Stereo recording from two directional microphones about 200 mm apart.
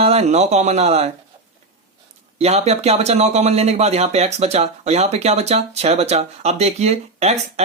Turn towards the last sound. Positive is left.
turn(degrees=-30)  # may be behind; listen again after turning